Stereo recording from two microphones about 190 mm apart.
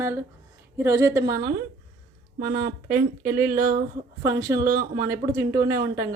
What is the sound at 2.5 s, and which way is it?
Speech, 55° right (ahead or behind).